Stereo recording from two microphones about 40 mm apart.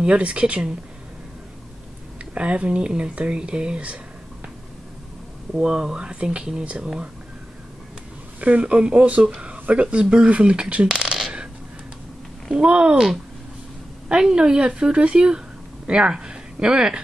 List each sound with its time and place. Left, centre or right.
0.0 s speech: right
2.3 s speech: right
5.5 s speech: right
8.4 s speech: right
12.5 s speech: right
14.0 s speech: right